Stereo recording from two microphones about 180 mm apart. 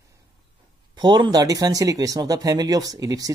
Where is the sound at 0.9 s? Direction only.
25° right (ahead or behind).